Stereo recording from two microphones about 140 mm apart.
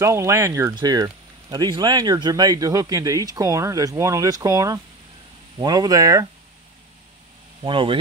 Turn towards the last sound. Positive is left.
turn(degrees=-35)  # may be behind; listen again after turning